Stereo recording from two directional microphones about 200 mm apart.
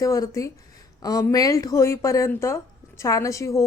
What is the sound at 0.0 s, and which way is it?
A woman's voice, 15° left (ahead or behind).